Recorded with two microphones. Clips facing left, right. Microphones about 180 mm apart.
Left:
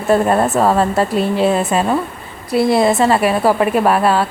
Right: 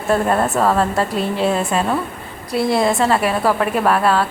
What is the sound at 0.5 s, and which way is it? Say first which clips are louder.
Speech: left 3 dB; 20° left (ahead or behind).